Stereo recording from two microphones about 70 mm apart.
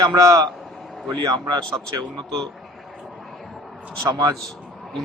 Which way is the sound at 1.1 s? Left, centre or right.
Right.